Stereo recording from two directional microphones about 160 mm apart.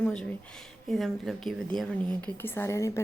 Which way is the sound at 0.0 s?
5° left (ahead or behind).